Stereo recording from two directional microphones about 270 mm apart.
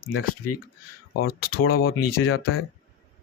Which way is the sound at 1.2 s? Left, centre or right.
Left.